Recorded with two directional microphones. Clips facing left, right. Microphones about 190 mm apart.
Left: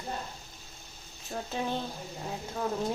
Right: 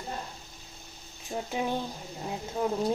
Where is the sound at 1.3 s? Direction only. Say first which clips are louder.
Right 2 dB; 15° right (ahead or behind).